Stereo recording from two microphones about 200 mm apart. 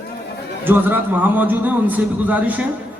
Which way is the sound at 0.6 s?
10° right (ahead or behind).